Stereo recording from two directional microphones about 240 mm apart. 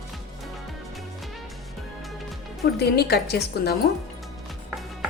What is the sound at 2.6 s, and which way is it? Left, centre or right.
A woman's voice, left.